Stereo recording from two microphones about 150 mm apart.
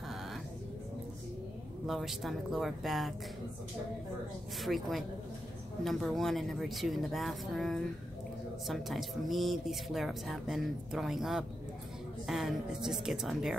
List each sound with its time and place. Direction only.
1.9 s speech: centre (ahead or behind)
4.6 s speech: centre (ahead or behind)